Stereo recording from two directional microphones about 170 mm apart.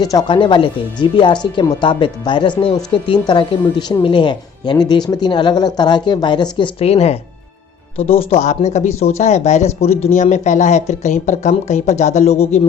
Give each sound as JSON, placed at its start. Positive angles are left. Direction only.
{"t": 0.0, "sound": "a woman's voice", "side_deg": 25}